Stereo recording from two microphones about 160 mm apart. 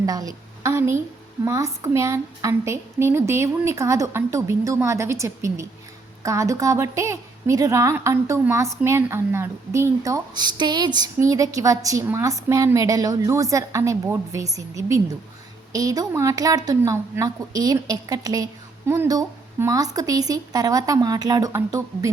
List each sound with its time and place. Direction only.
0.0 s a woman's voice: 25° right (ahead or behind)